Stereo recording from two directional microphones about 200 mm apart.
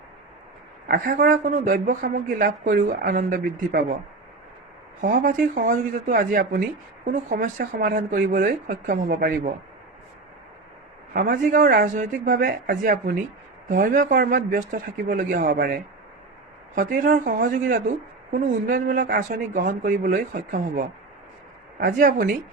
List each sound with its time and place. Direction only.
0.9 s a woman's voice: 40° right (ahead or behind)
4.9 s a woman's voice: 45° right (ahead or behind)
11.1 s a woman's voice: 45° right (ahead or behind)